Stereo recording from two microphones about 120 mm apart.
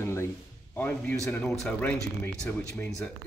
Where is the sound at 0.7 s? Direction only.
10° left (ahead or behind).